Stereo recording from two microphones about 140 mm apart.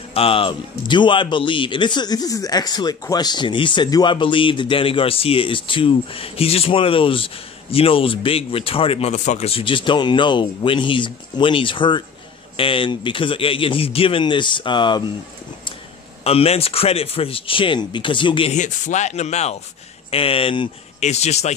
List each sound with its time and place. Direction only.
0.1 s speech: 40° left (ahead or behind)
9.1 s speech: 60° left (ahead or behind); by 15.0 s 35° left (ahead or behind)
16.3 s speech: 45° left (ahead or behind)
18.5 s speech: 60° left (ahead or behind)
20.1 s speech: 40° left (ahead or behind)
21.0 s a man's voice: 50° left (ahead or behind)